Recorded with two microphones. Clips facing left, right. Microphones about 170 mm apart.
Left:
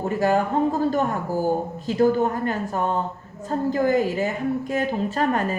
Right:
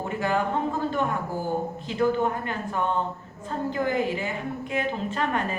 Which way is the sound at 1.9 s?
40° left (ahead or behind).